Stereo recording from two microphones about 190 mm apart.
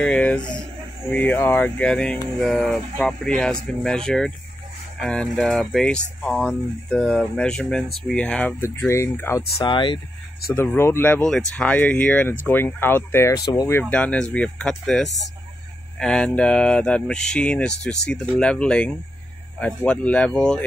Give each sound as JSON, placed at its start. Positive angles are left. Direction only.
{"t": 0.0, "sound": "speech", "side_deg": 5}
{"t": 9.6, "sound": "speech", "side_deg": 25}
{"t": 10.5, "sound": "speech", "side_deg": 15}